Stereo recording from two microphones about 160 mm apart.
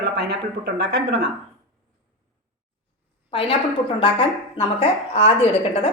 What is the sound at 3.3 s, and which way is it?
A woman's voice, 35° left (ahead or behind).